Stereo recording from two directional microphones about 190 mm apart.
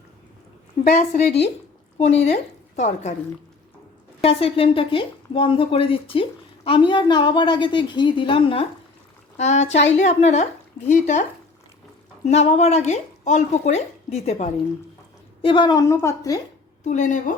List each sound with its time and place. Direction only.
0.9 s a woman's voice: 40° left (ahead or behind)
4.2 s speech: 30° left (ahead or behind)
16.8 s speech: 40° left (ahead or behind)